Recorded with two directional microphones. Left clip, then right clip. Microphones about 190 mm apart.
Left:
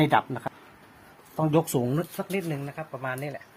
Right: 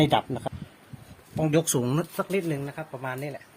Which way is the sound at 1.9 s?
35° right (ahead or behind).